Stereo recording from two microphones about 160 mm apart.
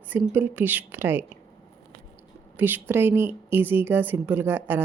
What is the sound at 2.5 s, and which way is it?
A woman's voice, 10° right (ahead or behind).